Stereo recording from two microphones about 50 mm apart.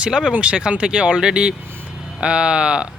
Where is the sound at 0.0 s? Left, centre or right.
Centre.